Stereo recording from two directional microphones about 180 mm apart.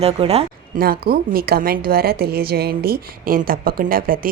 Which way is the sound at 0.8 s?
55° right (ahead or behind).